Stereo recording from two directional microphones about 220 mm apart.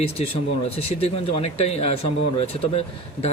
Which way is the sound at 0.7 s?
25° left (ahead or behind).